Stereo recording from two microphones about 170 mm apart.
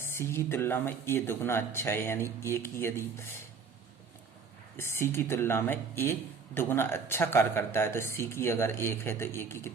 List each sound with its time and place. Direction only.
0.0 s speech: 15° left (ahead or behind)
4.8 s speech: 15° left (ahead or behind)